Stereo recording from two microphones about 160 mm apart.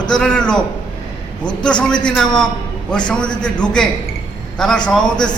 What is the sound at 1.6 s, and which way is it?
A man's voice, 5° left (ahead or behind).